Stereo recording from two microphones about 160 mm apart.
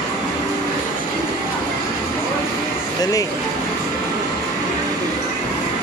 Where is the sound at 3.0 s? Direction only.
20° left (ahead or behind).